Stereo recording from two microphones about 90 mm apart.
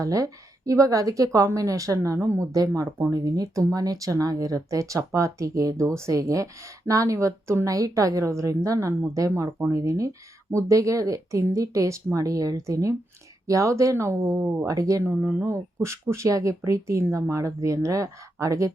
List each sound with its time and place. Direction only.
0.0 s speech: 40° right (ahead or behind)